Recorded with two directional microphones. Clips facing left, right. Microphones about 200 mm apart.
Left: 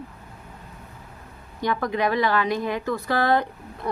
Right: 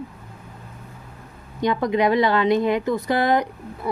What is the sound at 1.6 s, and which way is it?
A woman's voice, 20° right (ahead or behind).